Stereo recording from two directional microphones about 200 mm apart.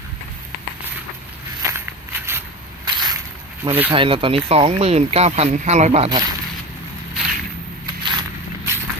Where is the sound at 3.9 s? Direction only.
25° right (ahead or behind).